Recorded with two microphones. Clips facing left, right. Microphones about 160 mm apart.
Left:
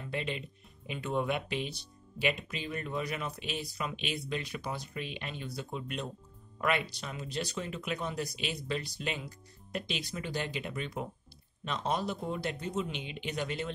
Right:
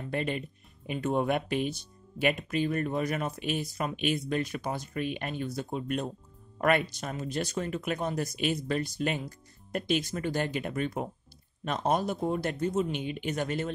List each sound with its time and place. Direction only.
0.1 s speech: 50° right (ahead or behind)